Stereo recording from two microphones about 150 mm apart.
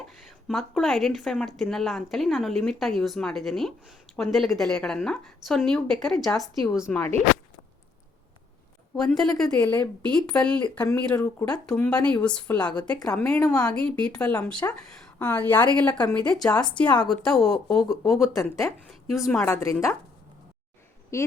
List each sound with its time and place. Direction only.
0.4 s a woman's voice: centre (ahead or behind)
9.0 s a woman's voice: 5° left (ahead or behind)
16.7 s a woman's voice: 30° left (ahead or behind)
17.1 s a woman's voice: centre (ahead or behind)
19.6 s speech: 20° left (ahead or behind)
21.1 s speech: 20° left (ahead or behind)